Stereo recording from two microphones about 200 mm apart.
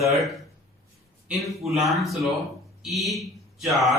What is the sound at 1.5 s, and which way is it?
Speech, centre (ahead or behind).